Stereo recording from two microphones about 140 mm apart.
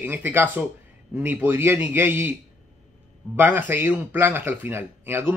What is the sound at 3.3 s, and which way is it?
A man's voice, 15° right (ahead or behind).